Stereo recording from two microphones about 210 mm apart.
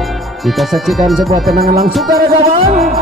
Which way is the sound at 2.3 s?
30° right (ahead or behind).